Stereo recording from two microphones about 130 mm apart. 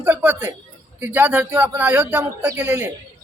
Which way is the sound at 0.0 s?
10° right (ahead or behind).